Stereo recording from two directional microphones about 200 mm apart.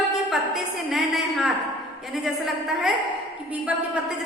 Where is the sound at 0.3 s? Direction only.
Centre (ahead or behind).